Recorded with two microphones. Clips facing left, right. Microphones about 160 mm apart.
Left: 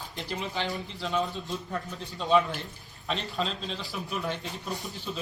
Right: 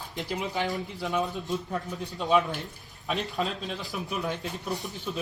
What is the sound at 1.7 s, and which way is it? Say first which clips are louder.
Speech: right 2 dB; 5° right (ahead or behind).